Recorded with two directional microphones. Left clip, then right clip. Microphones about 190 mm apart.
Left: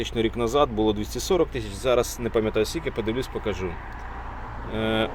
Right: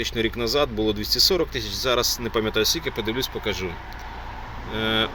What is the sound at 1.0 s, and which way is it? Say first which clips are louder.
Speech: right 3 dB; 35° left (ahead or behind).